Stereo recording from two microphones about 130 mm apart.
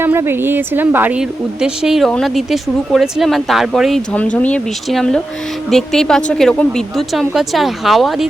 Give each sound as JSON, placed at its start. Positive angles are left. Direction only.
{"t": 0.0, "sound": "speech", "side_deg": -15}